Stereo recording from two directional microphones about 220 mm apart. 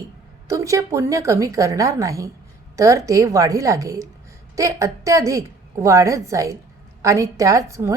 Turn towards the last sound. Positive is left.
turn(degrees=-15)  # may be behind; listen again after turning